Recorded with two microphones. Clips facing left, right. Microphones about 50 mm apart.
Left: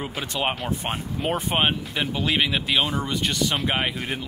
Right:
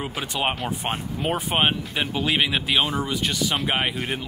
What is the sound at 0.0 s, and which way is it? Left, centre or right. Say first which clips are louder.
Speech: right 1 dB; centre.